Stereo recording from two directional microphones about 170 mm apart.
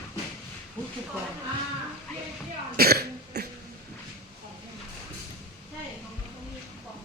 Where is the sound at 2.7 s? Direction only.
65° right (ahead or behind).